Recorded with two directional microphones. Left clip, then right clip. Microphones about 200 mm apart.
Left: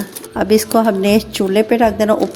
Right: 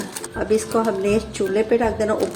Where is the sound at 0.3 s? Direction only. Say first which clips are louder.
Left 7 dB; 60° left (ahead or behind).